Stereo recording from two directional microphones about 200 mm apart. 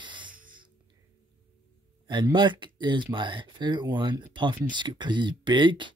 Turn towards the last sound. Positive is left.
turn(degrees=-25)  # may be behind; listen again after turning